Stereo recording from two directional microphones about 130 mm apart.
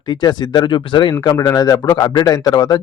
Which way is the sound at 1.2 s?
25° left (ahead or behind).